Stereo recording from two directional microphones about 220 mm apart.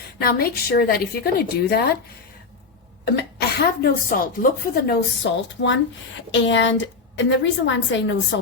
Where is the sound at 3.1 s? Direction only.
45° left (ahead or behind).